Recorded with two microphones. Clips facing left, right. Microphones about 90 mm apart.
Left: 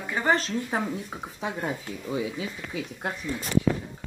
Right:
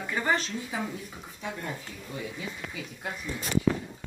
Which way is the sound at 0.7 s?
75° left (ahead or behind).